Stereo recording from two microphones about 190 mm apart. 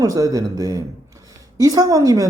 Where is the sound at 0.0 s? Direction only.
20° right (ahead or behind).